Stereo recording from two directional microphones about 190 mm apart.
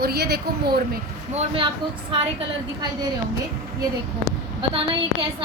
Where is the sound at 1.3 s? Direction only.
30° right (ahead or behind).